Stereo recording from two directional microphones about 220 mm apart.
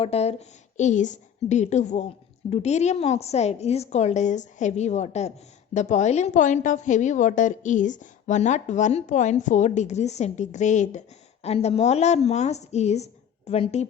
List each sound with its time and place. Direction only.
0.0 s a woman's voice: 30° left (ahead or behind)